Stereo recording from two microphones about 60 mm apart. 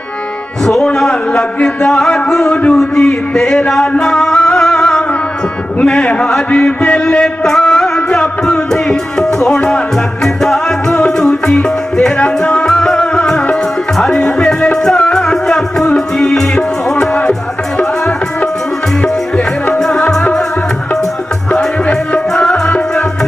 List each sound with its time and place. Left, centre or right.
0.6 s a man's voice: centre
4.0 s music: centre
5.8 s a sound: centre
10.2 s music: centre
19.8 s music: centre
21.5 s music: centre